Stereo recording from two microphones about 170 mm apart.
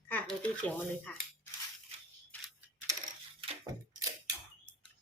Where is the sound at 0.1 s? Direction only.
10° left (ahead or behind).